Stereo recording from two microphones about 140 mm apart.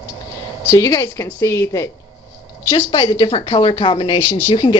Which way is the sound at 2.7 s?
35° left (ahead or behind).